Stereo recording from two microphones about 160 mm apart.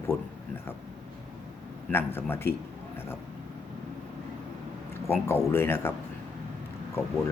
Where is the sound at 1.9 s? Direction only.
15° left (ahead or behind).